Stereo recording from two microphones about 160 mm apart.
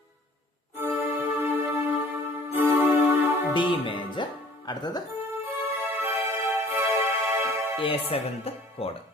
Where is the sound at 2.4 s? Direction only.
15° right (ahead or behind).